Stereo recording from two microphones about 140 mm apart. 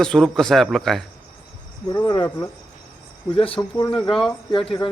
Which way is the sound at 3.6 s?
25° left (ahead or behind).